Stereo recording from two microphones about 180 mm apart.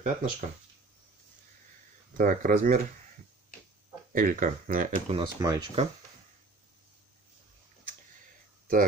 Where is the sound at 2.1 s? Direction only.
50° right (ahead or behind).